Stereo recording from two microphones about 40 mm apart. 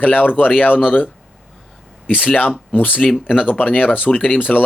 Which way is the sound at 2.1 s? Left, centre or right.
Left.